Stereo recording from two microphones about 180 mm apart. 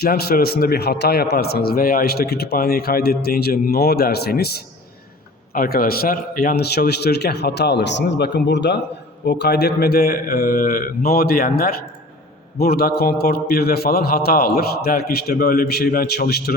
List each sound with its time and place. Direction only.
0.0 s a man's voice: 60° left (ahead or behind)